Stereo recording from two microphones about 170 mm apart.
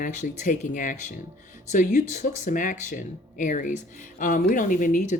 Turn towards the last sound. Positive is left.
turn(degrees=50)  # may be behind; listen again after turning